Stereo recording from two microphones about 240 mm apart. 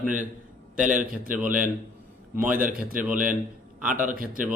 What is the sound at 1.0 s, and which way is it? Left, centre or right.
A man's voice, right.